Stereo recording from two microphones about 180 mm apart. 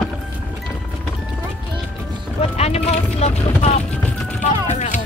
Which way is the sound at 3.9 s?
5° left (ahead or behind).